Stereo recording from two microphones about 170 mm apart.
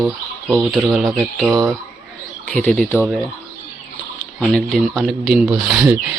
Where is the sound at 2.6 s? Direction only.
10° left (ahead or behind).